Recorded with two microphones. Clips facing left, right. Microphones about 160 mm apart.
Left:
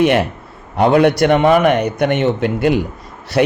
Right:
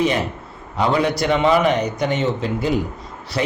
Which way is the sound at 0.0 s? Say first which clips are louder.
Left 6 dB; 65° left (ahead or behind).